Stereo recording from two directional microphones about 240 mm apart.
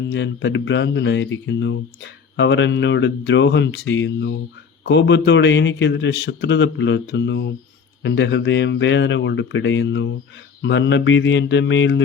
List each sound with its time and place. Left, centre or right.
0.1 s a man's voice: left